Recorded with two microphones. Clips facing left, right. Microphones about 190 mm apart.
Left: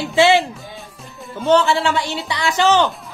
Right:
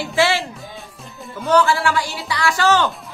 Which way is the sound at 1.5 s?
25° left (ahead or behind).